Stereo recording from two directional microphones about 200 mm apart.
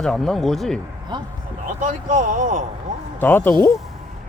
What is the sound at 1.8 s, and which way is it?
Speech, 40° right (ahead or behind).